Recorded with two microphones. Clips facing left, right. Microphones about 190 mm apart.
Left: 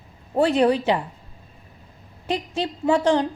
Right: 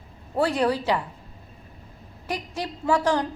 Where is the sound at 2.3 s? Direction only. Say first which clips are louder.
Left 5 dB; 25° left (ahead or behind).